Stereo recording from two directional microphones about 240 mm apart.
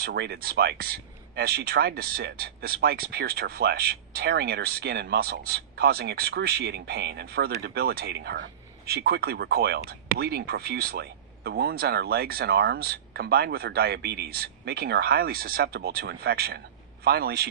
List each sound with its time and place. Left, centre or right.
0.0 s speech: right